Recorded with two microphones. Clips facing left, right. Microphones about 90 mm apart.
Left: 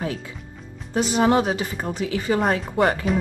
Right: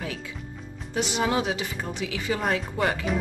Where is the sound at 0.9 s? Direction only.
40° left (ahead or behind).